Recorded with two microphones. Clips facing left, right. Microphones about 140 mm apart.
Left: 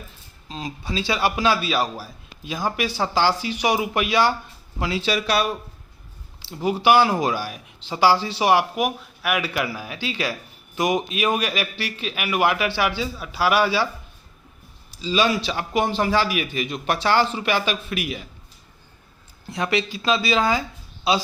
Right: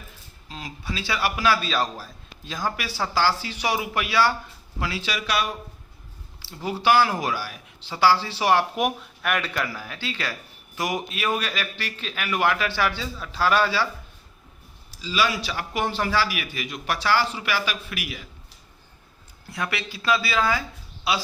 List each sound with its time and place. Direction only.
0.4 s a man's voice: 25° left (ahead or behind)
1.6 s a man's voice: 10° left (ahead or behind); by 5.5 s 35° left (ahead or behind)
6.6 s a man's voice: 15° left (ahead or behind)
8.7 s a man's voice: centre (ahead or behind)
14.8 s a man's voice: 20° left (ahead or behind)
19.5 s a man's voice: 25° left (ahead or behind)